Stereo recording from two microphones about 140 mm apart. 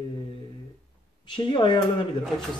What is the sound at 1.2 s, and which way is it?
Speech, 35° left (ahead or behind).